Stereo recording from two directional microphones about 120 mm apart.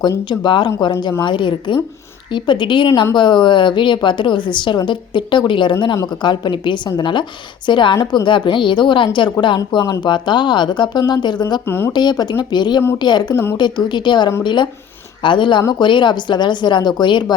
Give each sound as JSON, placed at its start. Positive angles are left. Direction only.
{"t": 0.3, "sound": "a woman's voice", "side_deg": 40}
{"t": 11.6, "sound": "speech", "side_deg": 20}
{"t": 11.9, "sound": "a woman's voice", "side_deg": 35}